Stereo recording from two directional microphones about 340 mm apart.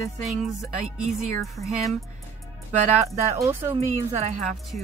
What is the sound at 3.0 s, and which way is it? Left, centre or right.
Speech, centre.